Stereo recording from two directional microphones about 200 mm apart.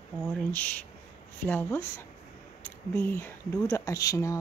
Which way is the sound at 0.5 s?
5° left (ahead or behind).